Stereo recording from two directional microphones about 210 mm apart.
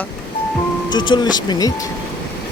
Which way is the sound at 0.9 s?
20° left (ahead or behind).